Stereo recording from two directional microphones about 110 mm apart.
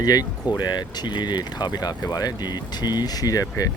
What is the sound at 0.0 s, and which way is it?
Speech, 35° left (ahead or behind).